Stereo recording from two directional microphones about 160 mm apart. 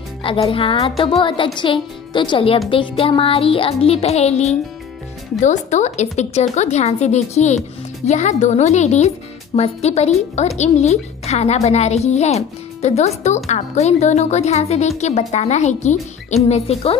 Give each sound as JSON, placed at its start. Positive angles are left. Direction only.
{"t": 0.2, "sound": "music", "side_deg": 35}
{"t": 5.4, "sound": "a woman's voice", "side_deg": 50}
{"t": 9.6, "sound": "music", "side_deg": 40}
{"t": 10.6, "sound": "a woman's voice", "side_deg": 45}
{"t": 16.4, "sound": "music", "side_deg": 40}